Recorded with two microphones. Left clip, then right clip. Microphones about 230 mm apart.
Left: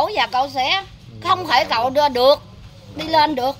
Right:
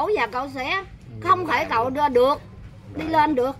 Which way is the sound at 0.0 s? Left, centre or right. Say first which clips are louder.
Left 4 dB; centre.